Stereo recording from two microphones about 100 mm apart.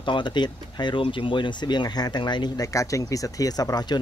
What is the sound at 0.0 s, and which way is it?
Speech, 55° left (ahead or behind).